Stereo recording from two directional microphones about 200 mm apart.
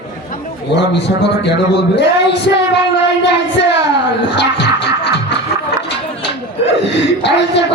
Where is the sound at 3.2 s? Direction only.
60° left (ahead or behind).